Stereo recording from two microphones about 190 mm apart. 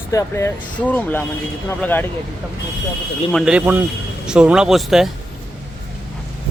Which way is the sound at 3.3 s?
Centre (ahead or behind).